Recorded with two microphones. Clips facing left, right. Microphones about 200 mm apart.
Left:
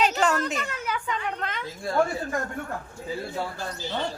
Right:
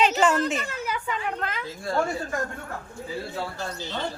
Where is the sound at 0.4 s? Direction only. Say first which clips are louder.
Right 2 dB; 5° right (ahead or behind).